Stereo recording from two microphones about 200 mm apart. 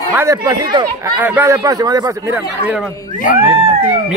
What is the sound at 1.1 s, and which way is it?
Speech, 10° right (ahead or behind).